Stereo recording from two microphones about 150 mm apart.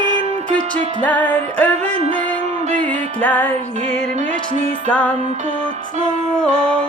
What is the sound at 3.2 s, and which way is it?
Music, 10° left (ahead or behind).